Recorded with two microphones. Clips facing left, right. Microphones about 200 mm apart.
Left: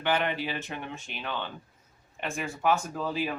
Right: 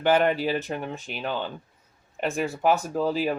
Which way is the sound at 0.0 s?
40° right (ahead or behind).